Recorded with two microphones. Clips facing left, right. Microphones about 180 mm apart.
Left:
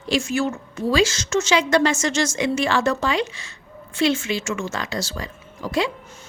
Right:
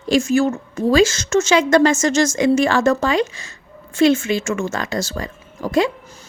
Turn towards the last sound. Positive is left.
turn(degrees=-45)  # may be behind; listen again after turning